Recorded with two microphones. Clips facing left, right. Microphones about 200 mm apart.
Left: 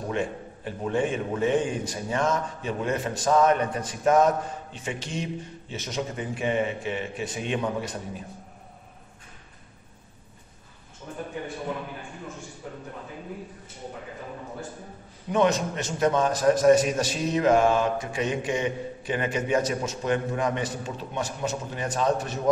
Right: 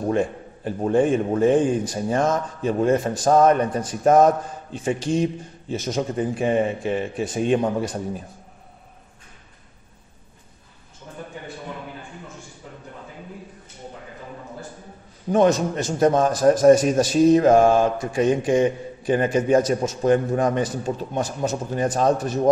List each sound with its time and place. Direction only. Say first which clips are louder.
0.1 s a man's voice: right 5 dB; 40° right (ahead or behind)
15.3 s a man's voice: right 5 dB; 40° right (ahead or behind)